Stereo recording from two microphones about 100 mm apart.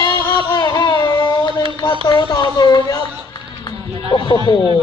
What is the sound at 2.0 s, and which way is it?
Speech, 45° left (ahead or behind).